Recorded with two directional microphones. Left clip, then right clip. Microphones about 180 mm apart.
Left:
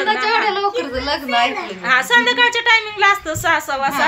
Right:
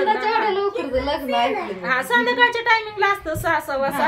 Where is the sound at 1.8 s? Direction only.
20° left (ahead or behind).